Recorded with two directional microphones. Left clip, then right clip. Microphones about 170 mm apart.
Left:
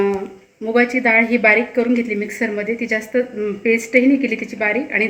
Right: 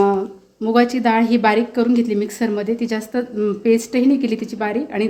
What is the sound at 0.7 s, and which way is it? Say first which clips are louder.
A woman's voice: left 1 dB; 70° right (ahead or behind).